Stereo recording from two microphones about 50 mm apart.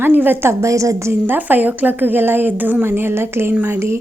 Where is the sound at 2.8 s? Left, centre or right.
Right.